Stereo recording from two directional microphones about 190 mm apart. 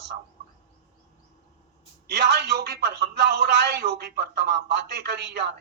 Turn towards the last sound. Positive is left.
turn(degrees=-60)  # may be behind; listen again after turning